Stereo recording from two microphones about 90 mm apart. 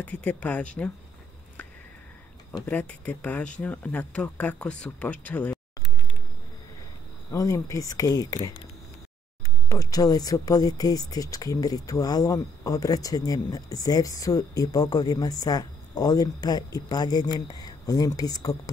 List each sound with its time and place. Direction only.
0.0 s speech: 20° left (ahead or behind)
2.6 s speech: 20° left (ahead or behind)
7.2 s speech: 35° left (ahead or behind)
9.7 s speech: 40° left (ahead or behind)